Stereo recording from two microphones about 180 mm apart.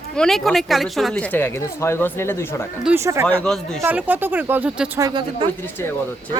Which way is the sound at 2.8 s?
15° right (ahead or behind).